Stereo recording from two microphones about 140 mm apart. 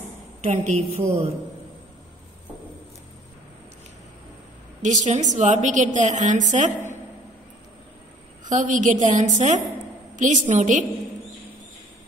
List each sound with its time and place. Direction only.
0.4 s a woman's voice: 55° right (ahead or behind)
4.8 s a woman's voice: 60° right (ahead or behind)
8.5 s a woman's voice: 65° right (ahead or behind)